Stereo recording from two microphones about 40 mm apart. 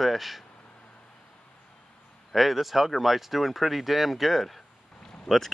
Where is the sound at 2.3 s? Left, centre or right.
Centre.